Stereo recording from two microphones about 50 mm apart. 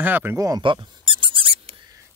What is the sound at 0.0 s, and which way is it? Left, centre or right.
Speech, right.